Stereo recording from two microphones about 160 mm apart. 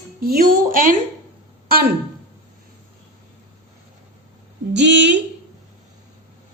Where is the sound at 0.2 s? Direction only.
65° right (ahead or behind).